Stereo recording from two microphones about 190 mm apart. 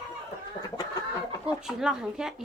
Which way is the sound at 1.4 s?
5° right (ahead or behind).